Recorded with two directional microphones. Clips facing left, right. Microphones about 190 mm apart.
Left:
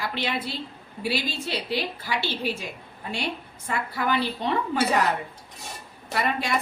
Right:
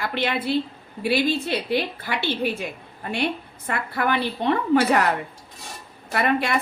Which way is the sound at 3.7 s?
60° right (ahead or behind).